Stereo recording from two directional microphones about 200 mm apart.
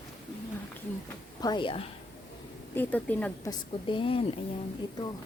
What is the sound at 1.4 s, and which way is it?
Speech, 25° left (ahead or behind).